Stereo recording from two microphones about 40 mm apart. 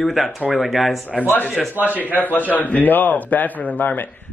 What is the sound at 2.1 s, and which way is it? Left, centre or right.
A man's voice, left.